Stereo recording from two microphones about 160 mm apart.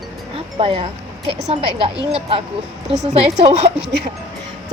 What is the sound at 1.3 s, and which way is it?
Speech, 45° right (ahead or behind).